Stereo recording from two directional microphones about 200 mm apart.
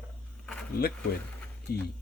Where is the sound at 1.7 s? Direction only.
50° left (ahead or behind).